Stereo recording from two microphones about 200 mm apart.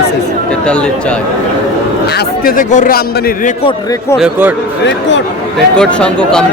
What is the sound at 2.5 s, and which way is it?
Speech, 40° left (ahead or behind).